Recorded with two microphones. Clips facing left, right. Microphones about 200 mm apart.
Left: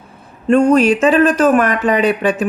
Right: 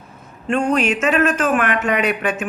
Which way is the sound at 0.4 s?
40° left (ahead or behind).